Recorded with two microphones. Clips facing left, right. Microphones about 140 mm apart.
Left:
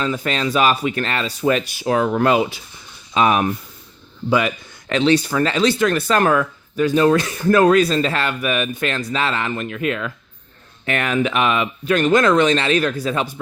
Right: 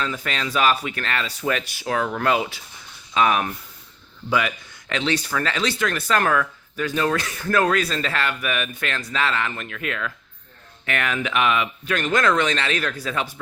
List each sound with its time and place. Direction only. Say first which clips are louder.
0.0 s speech: left 6 dB; 25° left (ahead or behind)
0.5 s speech: left 2 dB; 20° left (ahead or behind)
5.1 s speech: left 7 dB; 20° left (ahead or behind)